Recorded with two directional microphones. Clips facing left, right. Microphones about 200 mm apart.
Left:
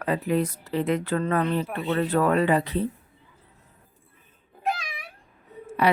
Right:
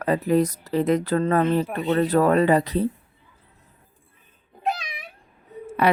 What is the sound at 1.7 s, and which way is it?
Speech, centre (ahead or behind).